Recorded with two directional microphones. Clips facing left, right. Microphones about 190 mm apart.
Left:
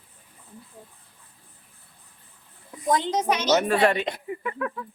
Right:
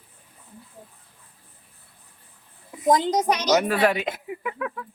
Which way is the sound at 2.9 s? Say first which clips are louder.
Right 3 dB; 40° right (ahead or behind).